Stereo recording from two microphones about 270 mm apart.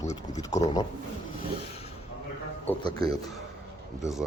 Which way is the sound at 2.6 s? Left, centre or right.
Centre.